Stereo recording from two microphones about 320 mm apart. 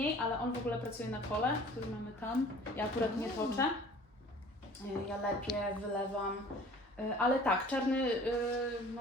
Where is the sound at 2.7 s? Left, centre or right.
Centre.